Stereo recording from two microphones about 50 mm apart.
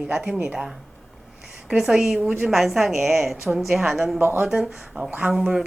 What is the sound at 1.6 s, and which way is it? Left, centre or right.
A woman's voice, centre.